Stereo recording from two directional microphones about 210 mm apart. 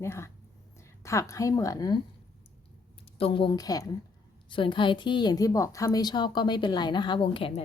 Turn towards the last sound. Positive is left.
turn(degrees=25)  # may be behind; listen again after turning